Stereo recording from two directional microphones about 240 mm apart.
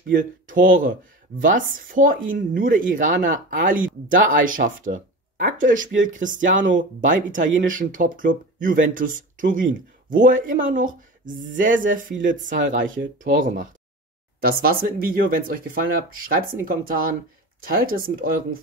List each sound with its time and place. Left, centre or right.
0.1 s speech: right